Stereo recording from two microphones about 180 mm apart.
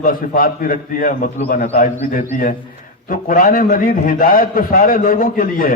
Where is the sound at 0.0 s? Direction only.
50° left (ahead or behind).